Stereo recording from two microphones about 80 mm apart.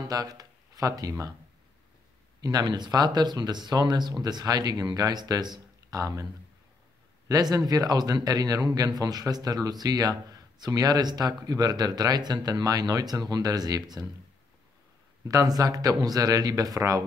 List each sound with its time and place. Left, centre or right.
0.1 s speech: right
2.4 s speech: right
7.2 s a man's voice: right
15.2 s a man's voice: right